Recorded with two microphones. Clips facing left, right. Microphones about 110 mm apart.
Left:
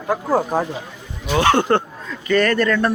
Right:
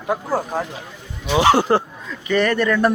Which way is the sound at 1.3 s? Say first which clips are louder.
Right 1 dB; 10° right (ahead or behind).